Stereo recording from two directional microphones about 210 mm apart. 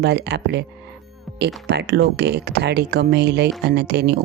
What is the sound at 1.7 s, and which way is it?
Speech, 50° right (ahead or behind).